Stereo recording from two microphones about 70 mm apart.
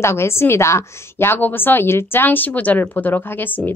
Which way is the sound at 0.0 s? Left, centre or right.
Left.